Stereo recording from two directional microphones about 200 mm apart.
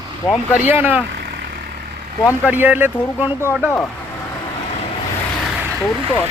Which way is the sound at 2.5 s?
10° right (ahead or behind).